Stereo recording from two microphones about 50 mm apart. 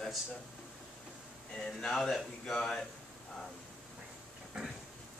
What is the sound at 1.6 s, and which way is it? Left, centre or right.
Speech, centre.